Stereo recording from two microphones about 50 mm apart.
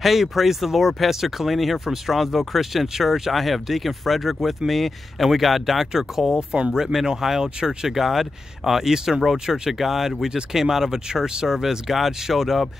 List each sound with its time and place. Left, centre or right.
0.0 s speech: centre